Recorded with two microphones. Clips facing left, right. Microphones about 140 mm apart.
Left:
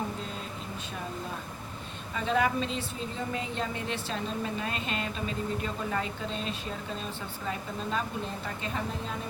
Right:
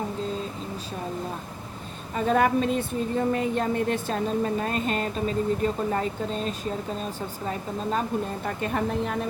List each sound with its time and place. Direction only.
2.1 s a woman's voice: 50° right (ahead or behind)
8.4 s a woman's voice: 55° right (ahead or behind)